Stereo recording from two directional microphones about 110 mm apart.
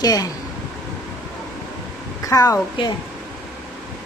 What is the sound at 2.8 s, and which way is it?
Speech, 50° left (ahead or behind).